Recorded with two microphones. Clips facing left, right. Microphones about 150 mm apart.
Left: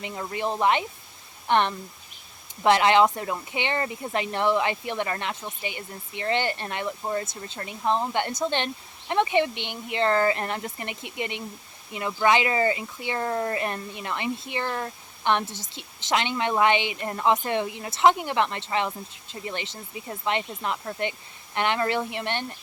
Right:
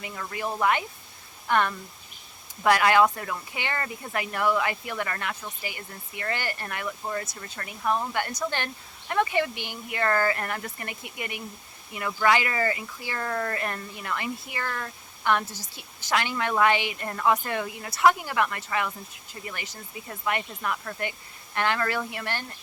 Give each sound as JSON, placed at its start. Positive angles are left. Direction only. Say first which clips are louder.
{"t": 0.0, "sound": "speech", "louder": "left 3 dB", "side_deg": 25}